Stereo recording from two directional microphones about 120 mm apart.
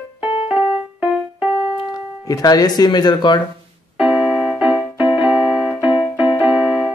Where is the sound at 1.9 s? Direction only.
30° left (ahead or behind).